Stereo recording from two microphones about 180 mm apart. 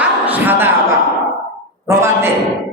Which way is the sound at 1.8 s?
15° right (ahead or behind).